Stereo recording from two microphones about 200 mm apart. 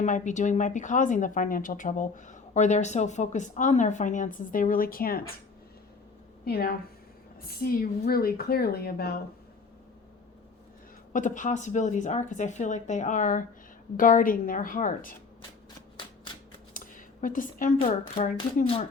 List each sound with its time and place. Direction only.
0.0 s a woman's voice: 35° left (ahead or behind)
6.4 s a woman's voice: 50° left (ahead or behind)
11.1 s a woman's voice: 40° left (ahead or behind)
16.7 s a sound: 40° left (ahead or behind)
18.1 s speech: 35° left (ahead or behind)